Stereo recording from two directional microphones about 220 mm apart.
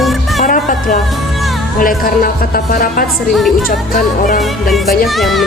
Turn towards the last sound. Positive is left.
turn(degrees=0)  # may be behind; listen again after turning